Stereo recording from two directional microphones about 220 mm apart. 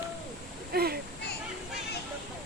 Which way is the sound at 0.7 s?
45° right (ahead or behind).